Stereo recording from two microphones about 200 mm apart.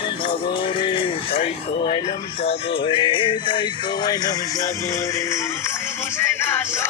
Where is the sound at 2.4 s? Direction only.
30° left (ahead or behind).